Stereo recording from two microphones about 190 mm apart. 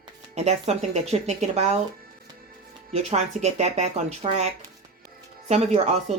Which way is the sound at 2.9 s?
35° right (ahead or behind).